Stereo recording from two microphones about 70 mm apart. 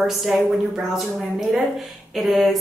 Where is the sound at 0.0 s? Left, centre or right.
Centre.